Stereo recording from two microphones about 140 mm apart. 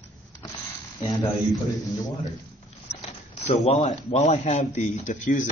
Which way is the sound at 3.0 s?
50° left (ahead or behind).